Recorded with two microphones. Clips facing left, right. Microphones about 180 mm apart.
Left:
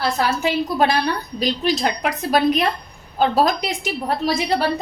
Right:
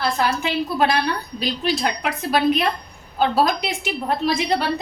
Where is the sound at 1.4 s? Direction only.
40° left (ahead or behind).